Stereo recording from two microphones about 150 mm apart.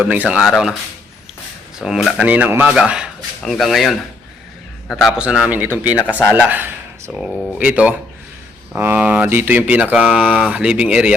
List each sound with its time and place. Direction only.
0.0 s speech: 10° right (ahead or behind)
1.8 s speech: centre (ahead or behind)